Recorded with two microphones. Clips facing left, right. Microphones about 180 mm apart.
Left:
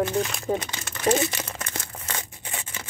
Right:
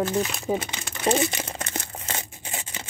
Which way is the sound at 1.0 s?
30° right (ahead or behind).